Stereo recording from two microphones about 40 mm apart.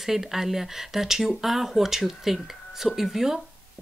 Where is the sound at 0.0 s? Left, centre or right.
Centre.